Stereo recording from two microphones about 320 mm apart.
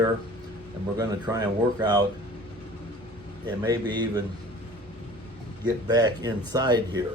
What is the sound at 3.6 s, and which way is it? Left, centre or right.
Speech, centre.